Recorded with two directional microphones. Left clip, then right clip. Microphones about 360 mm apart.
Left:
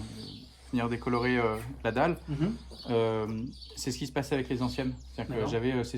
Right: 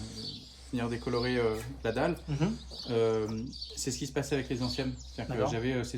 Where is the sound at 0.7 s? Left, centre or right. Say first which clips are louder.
Left 3 dB; centre.